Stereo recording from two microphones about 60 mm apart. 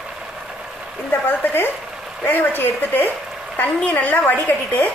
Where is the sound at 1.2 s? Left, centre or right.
Left.